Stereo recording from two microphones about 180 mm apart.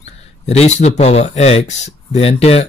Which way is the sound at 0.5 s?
40° left (ahead or behind).